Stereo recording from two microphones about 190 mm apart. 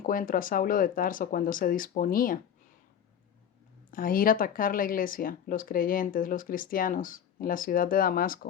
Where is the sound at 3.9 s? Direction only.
45° left (ahead or behind).